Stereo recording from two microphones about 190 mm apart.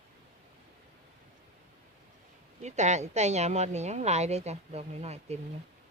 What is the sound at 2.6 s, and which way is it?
Speech, 35° right (ahead or behind).